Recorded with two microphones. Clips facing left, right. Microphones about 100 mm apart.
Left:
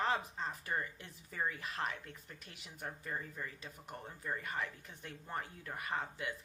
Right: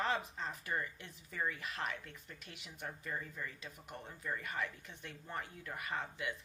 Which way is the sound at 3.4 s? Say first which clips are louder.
Even; 20° left (ahead or behind).